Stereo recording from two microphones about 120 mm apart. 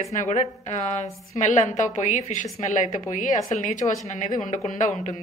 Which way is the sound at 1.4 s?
90° left.